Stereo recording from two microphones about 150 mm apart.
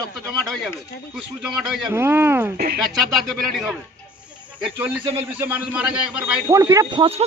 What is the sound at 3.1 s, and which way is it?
Speech, centre (ahead or behind).